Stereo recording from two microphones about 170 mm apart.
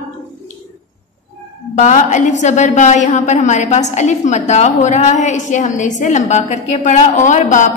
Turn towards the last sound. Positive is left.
turn(degrees=45)  # may be behind; listen again after turning